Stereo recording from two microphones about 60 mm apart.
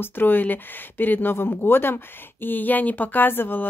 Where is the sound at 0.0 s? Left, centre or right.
Left.